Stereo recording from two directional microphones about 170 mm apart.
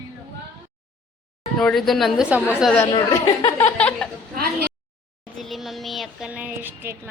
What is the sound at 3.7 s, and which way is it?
Speech, 5° left (ahead or behind).